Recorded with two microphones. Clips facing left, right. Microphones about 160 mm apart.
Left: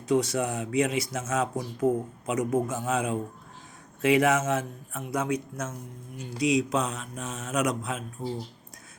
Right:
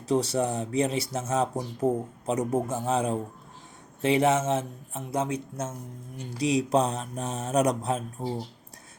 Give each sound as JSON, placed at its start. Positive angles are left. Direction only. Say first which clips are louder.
{"t": 0.1, "sound": "speech", "louder": "even", "side_deg": -30}